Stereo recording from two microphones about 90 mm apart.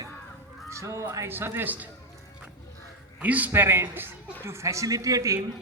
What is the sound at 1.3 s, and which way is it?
Speech, 25° right (ahead or behind).